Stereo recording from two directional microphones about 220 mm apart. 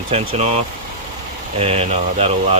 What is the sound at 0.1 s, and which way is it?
Speech, 30° right (ahead or behind).